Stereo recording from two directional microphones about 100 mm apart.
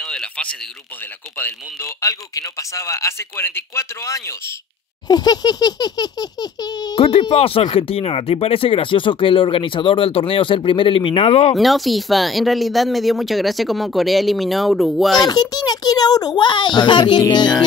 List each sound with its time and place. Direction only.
0.0 s a sound: 5° left (ahead or behind)
2.0 s speech: 35° left (ahead or behind)
5.0 s speech: 40° left (ahead or behind)
7.0 s speech: 65° left (ahead or behind); by 11.5 s 80° left
11.5 s speech: centre (ahead or behind)
15.2 s speech: 40° left (ahead or behind)
17.2 s music: 45° left (ahead or behind)